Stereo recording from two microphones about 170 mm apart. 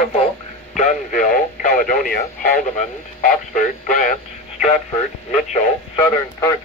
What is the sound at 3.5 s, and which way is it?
Speech, 50° left (ahead or behind).